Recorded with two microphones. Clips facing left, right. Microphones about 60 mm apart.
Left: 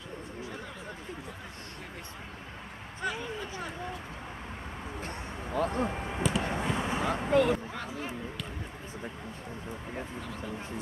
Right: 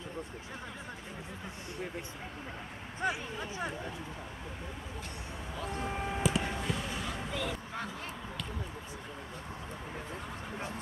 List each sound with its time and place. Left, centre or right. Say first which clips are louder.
3.0 s speech: even; centre
5.5 s speech: left 9 dB; left
6.1 s vehicle: left 1 dB; centre
6.4 s vehicle: left 4 dB; left
7.1 s vehicle: left 11 dB; left